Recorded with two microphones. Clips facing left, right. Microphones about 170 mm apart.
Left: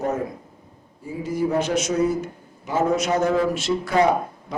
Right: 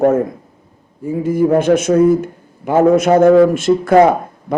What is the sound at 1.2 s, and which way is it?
A man's voice, 55° right (ahead or behind).